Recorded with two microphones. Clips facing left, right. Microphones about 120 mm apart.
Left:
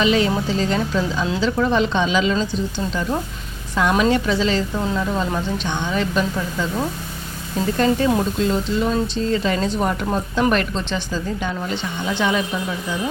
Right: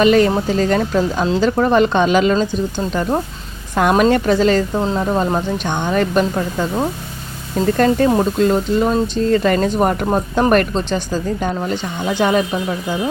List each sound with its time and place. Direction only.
0.0 s speech: 50° right (ahead or behind)
7.8 s speech: 50° right (ahead or behind)